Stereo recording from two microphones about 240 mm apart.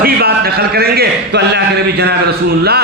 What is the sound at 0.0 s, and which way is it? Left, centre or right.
A man's voice, right.